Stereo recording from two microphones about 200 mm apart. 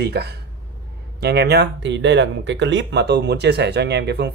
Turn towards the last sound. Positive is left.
turn(degrees=-55)  # may be behind; listen again after turning